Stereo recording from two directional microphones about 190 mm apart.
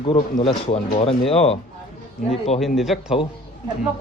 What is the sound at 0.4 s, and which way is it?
Speech, 30° left (ahead or behind).